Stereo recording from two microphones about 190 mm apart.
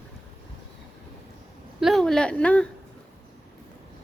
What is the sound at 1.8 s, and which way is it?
Speech, centre (ahead or behind).